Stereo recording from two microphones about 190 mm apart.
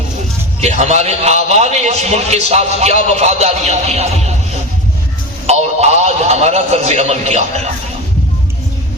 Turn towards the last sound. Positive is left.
turn(degrees=-35)  # may be behind; listen again after turning